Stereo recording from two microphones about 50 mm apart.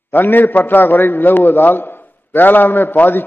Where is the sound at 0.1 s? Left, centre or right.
Left.